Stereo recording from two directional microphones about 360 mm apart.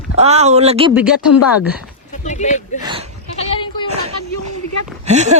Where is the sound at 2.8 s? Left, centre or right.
Centre.